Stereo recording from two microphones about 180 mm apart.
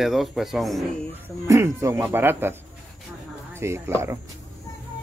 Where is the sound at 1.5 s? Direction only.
15° right (ahead or behind).